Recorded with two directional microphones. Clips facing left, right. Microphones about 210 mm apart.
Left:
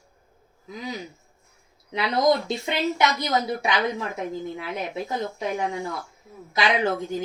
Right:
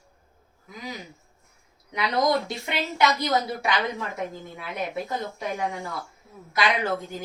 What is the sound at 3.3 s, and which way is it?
Speech, 20° left (ahead or behind).